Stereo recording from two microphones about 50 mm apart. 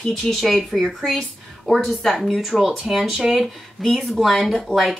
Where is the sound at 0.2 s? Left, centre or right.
Centre.